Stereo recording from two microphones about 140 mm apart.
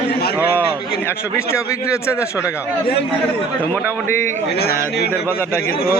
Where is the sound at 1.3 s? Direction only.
20° left (ahead or behind).